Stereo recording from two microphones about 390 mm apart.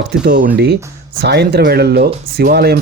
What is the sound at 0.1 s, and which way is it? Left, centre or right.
Speech, right.